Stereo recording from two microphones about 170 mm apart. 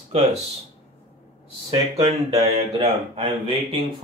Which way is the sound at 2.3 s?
30° right (ahead or behind).